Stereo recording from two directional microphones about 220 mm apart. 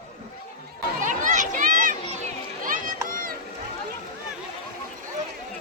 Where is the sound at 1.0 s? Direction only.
35° right (ahead or behind).